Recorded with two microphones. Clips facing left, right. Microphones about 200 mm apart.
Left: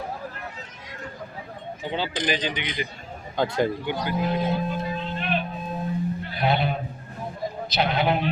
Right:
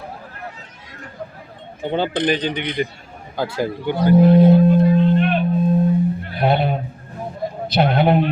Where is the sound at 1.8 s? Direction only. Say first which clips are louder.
Right 8 dB; 55° right (ahead or behind).